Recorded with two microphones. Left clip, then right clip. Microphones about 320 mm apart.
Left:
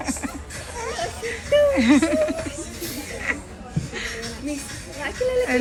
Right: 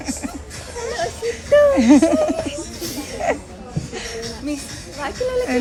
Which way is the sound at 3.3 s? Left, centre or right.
Centre.